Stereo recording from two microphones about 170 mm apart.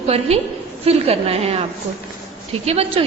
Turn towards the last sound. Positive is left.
turn(degrees=-35)  # may be behind; listen again after turning